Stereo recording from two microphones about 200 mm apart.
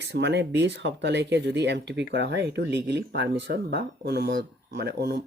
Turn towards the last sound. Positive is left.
turn(degrees=-55)  # may be behind; listen again after turning